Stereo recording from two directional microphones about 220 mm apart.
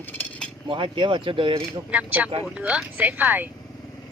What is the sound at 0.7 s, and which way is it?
Speech, 20° right (ahead or behind).